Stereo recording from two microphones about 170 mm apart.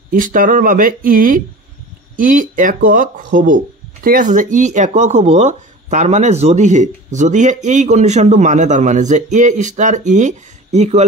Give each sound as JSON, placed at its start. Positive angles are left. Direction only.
{"t": 0.1, "sound": "speech", "side_deg": -50}